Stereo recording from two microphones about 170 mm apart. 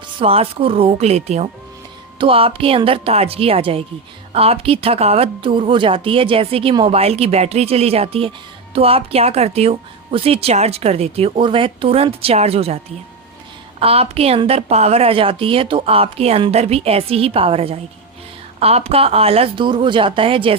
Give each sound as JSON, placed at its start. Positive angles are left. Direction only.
{"t": 0.2, "sound": "speech", "side_deg": -35}